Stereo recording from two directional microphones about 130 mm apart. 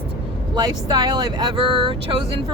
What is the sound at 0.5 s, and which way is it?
Speech, 35° right (ahead or behind).